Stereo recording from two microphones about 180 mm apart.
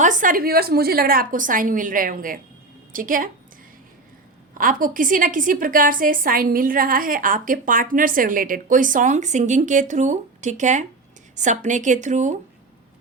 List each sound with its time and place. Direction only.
0.0 s a woman's voice: 45° right (ahead or behind)
4.5 s a woman's voice: 50° right (ahead or behind)